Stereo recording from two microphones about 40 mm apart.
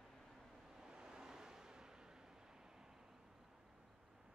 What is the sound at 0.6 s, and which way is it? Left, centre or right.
Vehicle, centre.